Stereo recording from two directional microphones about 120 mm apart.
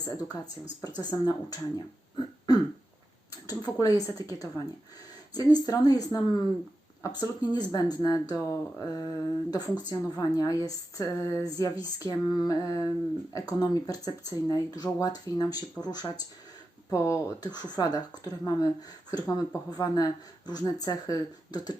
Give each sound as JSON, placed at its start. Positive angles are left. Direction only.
{"t": 0.1, "sound": "speech", "side_deg": 30}
{"t": 2.5, "sound": "throat clearing", "side_deg": 30}
{"t": 3.4, "sound": "speech", "side_deg": 30}